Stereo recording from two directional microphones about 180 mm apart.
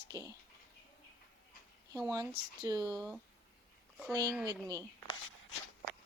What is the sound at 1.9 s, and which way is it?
Speech, 20° right (ahead or behind).